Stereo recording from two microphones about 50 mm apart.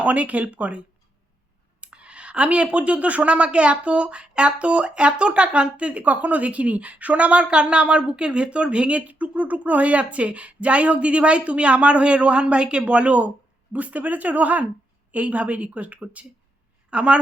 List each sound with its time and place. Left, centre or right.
0.0 s speech: right